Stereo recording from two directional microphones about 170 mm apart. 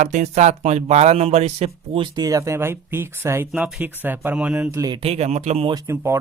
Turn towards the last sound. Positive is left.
turn(degrees=-15)  # may be behind; listen again after turning